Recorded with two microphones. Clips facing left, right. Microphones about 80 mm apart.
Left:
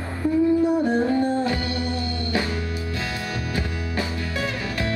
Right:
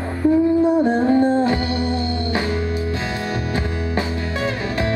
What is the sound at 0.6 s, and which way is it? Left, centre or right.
Music, right.